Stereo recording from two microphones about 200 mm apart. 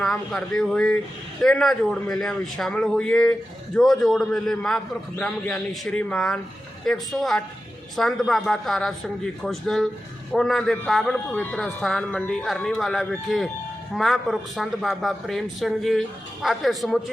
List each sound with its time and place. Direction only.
0.0 s a man's voice: centre (ahead or behind)